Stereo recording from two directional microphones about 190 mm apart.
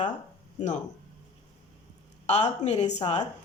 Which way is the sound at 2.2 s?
35° left (ahead or behind).